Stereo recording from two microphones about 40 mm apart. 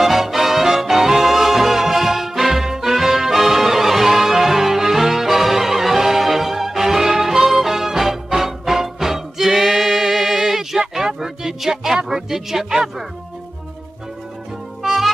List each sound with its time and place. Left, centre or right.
0.0 s music: centre
12.1 s speech: centre
14.8 s music: centre